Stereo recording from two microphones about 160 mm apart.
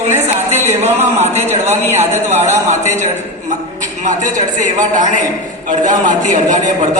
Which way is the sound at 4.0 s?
50° right (ahead or behind).